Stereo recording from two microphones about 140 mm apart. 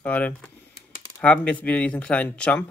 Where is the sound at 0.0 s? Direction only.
10° left (ahead or behind).